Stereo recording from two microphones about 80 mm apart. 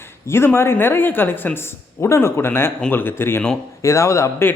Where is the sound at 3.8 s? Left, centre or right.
Left.